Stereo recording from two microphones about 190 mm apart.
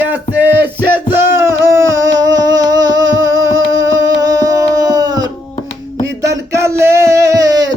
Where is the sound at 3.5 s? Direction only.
75° right (ahead or behind).